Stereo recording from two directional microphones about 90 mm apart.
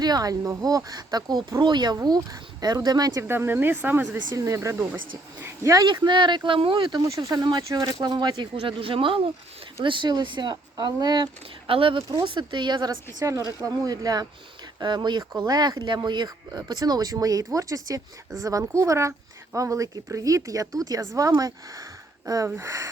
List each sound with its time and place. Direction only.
0.0 s speech: 45° right (ahead or behind)
3.2 s speech: 25° right (ahead or behind)
4.3 s speech: 40° right (ahead or behind)
5.8 s speech: 55° right (ahead or behind)
7.1 s speech: 45° right (ahead or behind)
8.6 s speech: 80° right
9.8 s speech: 65° right (ahead or behind)
11.7 s speech: 80° right
12.2 s speech: 65° right (ahead or behind)
13.1 s speech: 40° right (ahead or behind)
22.4 s speech: 30° right (ahead or behind)